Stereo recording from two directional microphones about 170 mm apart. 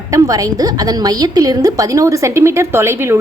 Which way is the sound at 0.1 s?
20° right (ahead or behind).